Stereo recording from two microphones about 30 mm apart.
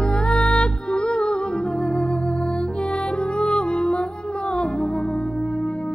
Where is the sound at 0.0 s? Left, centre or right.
Left.